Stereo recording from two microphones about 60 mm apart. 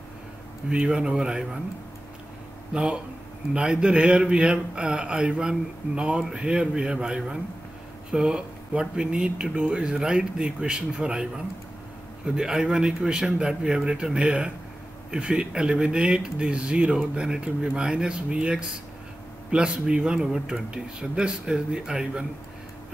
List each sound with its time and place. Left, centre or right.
0.7 s speech: centre
2.7 s speech: centre